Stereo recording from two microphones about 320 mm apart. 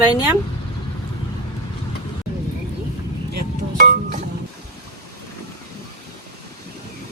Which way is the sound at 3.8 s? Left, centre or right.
Right.